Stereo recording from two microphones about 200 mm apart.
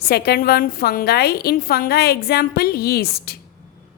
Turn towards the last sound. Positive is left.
turn(degrees=50)  # may be behind; listen again after turning